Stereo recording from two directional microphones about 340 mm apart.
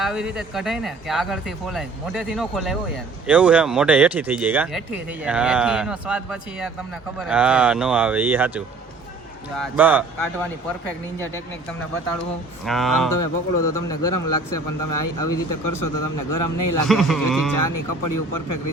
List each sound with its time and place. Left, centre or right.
0.0 s speech: centre
12.6 s speech: centre
13.1 s a man's voice: left
16.9 s speech: centre
17.5 s a man's voice: left